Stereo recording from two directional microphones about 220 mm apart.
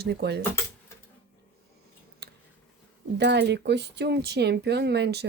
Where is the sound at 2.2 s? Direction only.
45° right (ahead or behind).